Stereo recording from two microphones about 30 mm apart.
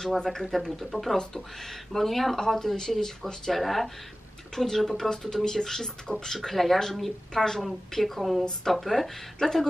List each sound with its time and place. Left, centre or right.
0.2 s speech: centre
3.5 s a woman's voice: centre